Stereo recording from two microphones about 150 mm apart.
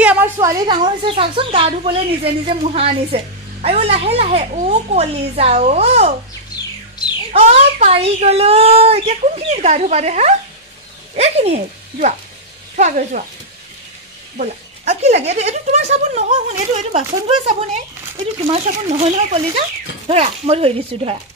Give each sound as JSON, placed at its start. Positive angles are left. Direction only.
{"t": 0.0, "sound": "a sound", "side_deg": -10}
{"t": 0.4, "sound": "a woman's voice", "side_deg": -30}
{"t": 7.3, "sound": "a child's voice", "side_deg": -45}
{"t": 14.4, "sound": "a child's voice", "side_deg": -50}